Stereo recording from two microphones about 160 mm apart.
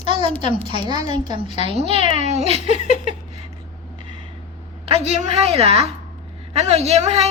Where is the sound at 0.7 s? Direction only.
30° right (ahead or behind).